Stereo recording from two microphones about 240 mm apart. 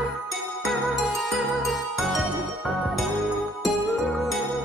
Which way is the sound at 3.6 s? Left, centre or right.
Centre.